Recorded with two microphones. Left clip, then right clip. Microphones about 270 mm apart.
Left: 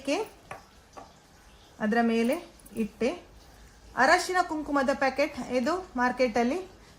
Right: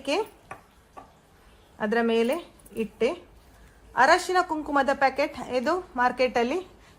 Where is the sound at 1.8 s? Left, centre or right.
Centre.